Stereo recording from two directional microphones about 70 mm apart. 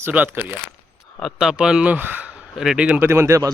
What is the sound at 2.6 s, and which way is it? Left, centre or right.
Speech, centre.